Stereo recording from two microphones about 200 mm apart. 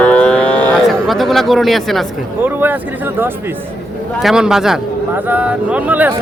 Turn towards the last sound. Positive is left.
turn(degrees=-10)  # may be behind; listen again after turning